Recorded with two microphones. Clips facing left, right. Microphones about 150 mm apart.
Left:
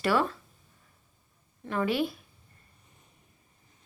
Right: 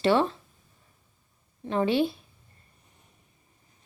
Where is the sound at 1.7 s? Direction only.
25° right (ahead or behind).